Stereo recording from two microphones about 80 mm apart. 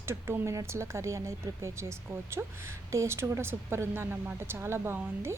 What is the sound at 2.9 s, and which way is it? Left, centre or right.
A woman's voice, right.